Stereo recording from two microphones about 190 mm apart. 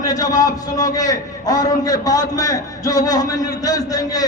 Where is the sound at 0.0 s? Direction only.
20° left (ahead or behind).